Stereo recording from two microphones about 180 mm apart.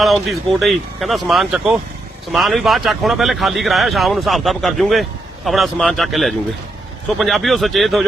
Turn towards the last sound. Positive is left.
turn(degrees=0)  # may be behind; listen again after turning